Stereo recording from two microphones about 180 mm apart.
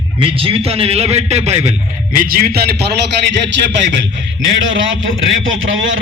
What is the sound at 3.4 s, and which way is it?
A man's voice, 85° right.